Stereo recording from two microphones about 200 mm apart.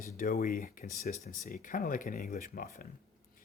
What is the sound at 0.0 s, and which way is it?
Speech, 45° left (ahead or behind).